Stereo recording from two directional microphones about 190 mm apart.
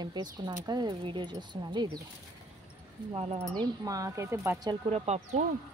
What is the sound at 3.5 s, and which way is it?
Speech, 20° right (ahead or behind).